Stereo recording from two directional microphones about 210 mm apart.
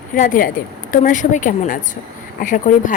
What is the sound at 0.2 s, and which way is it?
Speech, 40° left (ahead or behind).